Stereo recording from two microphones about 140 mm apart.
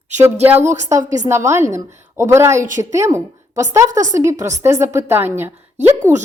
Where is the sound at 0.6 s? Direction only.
60° right (ahead or behind).